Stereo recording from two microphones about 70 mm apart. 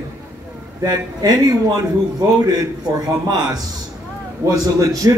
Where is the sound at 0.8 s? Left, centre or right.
Right.